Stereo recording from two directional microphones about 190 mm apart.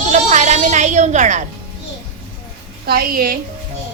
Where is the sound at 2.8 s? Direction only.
55° right (ahead or behind).